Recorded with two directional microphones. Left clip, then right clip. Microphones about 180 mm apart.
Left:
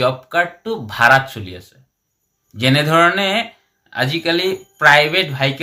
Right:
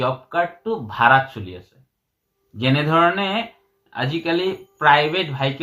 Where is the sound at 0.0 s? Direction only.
20° left (ahead or behind).